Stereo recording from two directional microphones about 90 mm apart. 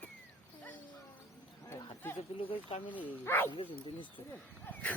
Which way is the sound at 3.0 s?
20° left (ahead or behind).